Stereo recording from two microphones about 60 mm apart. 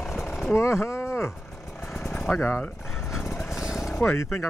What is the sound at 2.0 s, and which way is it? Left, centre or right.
Vehicle, centre.